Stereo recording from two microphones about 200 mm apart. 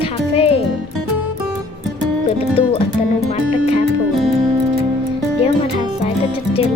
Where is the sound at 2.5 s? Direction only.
30° left (ahead or behind).